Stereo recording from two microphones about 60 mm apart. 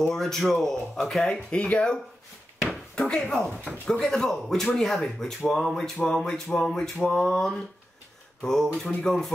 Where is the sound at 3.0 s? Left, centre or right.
Centre.